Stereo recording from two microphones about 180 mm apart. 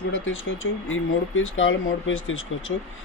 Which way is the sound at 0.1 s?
90° left.